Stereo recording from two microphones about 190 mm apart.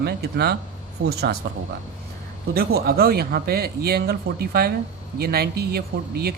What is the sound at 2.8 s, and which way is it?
Speech, 55° right (ahead or behind).